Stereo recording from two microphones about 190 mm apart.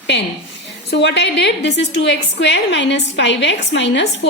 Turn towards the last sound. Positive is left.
turn(degrees=65)  # may be behind; listen again after turning